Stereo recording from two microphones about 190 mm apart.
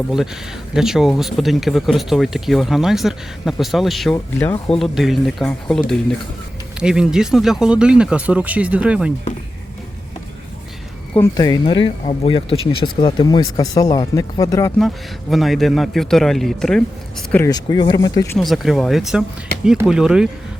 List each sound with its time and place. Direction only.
0.7 s speech: centre (ahead or behind)
11.1 s speech: 15° left (ahead or behind)
14.8 s speech: centre (ahead or behind)
17.3 s speech: 15° left (ahead or behind)
18.3 s speech: centre (ahead or behind)